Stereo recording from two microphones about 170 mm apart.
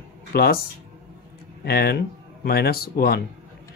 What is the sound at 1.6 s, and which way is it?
Speech, 65° left (ahead or behind).